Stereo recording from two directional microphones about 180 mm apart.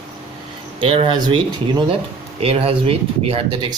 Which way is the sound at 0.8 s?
30° right (ahead or behind).